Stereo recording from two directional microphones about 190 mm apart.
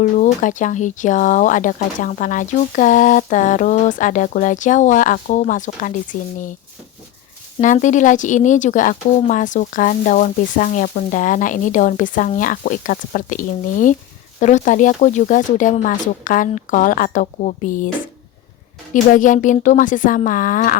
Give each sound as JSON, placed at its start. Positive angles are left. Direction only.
{"t": 0.0, "sound": "speech", "side_deg": 40}
{"t": 7.6, "sound": "speech", "side_deg": 40}
{"t": 19.1, "sound": "speech", "side_deg": 40}